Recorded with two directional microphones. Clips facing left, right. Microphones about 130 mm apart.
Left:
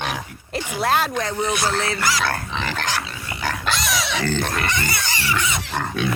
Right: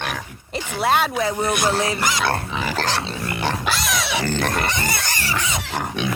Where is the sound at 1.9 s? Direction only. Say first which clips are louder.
Even; 20° right (ahead or behind).